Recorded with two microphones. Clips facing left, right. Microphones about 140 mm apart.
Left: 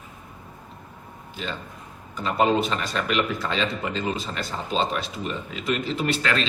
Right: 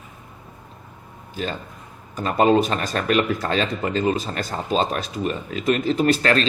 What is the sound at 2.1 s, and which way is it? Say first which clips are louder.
Speech: right 4 dB; 50° right (ahead or behind).